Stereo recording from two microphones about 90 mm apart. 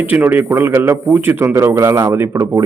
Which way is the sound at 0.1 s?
20° right (ahead or behind).